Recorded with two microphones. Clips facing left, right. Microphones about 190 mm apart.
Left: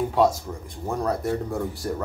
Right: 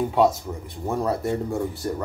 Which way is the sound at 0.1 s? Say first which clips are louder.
Right 1 dB; centre (ahead or behind).